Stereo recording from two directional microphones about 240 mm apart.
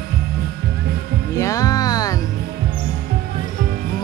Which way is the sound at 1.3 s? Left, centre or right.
Centre.